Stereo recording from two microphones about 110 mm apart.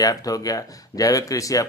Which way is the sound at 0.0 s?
35° left (ahead or behind).